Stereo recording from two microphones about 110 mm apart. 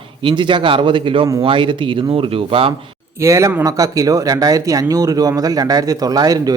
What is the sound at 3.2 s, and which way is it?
Speech, 25° right (ahead or behind).